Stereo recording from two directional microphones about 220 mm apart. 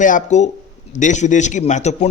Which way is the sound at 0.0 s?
35° left (ahead or behind).